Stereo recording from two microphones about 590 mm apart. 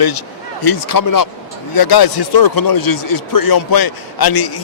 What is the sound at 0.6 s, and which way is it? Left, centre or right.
Speech, left.